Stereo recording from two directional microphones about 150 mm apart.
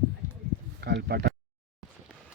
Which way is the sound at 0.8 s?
90° right.